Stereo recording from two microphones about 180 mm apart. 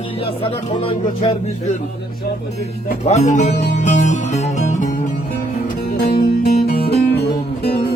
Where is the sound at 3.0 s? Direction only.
40° left (ahead or behind).